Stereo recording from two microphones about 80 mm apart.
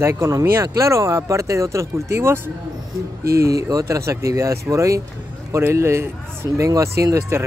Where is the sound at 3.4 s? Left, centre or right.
Right.